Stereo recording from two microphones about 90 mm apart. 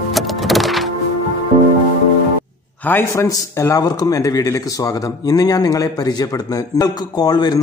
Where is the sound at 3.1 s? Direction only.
40° left (ahead or behind).